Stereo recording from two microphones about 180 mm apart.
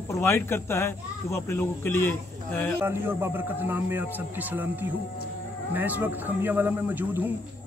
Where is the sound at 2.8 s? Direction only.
15° right (ahead or behind).